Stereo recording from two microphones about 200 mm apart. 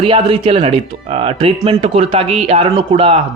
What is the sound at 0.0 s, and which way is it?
A man's voice, 25° right (ahead or behind).